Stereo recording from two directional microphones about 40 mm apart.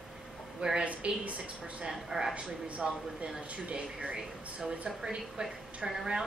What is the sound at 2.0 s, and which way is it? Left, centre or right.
Speech, centre.